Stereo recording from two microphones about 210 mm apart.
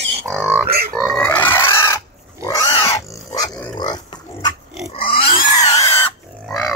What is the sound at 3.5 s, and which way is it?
Pig, 5° left (ahead or behind).